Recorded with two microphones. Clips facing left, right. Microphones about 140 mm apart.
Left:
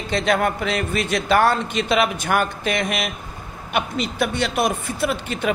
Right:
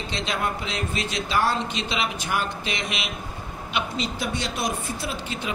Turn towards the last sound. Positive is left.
turn(degrees=60)  # may be behind; listen again after turning